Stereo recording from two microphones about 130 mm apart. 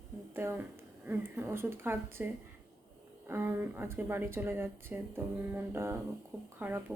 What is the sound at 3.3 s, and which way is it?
Speech, 15° right (ahead or behind).